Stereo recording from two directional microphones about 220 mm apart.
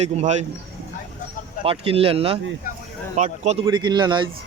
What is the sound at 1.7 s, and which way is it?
A man's voice, 25° right (ahead or behind).